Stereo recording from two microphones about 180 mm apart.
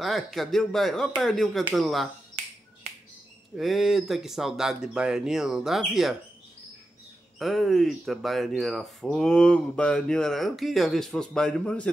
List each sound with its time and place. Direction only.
0.0 s speech: centre (ahead or behind)
3.5 s speech: centre (ahead or behind)
7.3 s speech: centre (ahead or behind)